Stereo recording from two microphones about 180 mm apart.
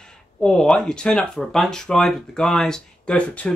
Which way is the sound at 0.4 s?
5° left (ahead or behind).